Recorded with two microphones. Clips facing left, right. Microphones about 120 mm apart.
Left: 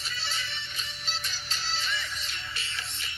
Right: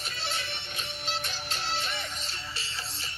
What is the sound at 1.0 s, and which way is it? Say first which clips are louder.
Music: right 5 dB; 55° right (ahead or behind).